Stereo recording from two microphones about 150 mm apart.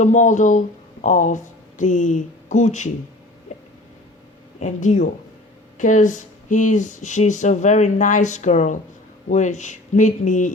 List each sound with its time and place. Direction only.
0.0 s speech: 55° left (ahead or behind)
4.6 s speech: 55° left (ahead or behind)